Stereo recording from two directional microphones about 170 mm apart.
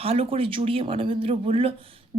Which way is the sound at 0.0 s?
35° right (ahead or behind).